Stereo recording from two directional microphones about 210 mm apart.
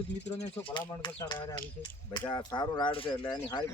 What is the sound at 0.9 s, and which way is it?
Speech, 20° left (ahead or behind).